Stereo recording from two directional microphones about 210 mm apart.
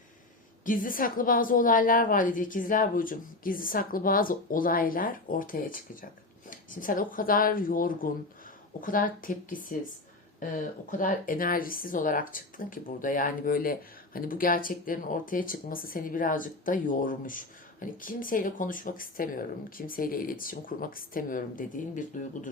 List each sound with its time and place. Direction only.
0.6 s speech: 40° left (ahead or behind)